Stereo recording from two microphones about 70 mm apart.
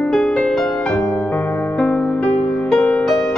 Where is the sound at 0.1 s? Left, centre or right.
Centre.